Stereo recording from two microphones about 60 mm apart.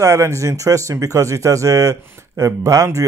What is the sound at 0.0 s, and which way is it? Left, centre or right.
Speech, right.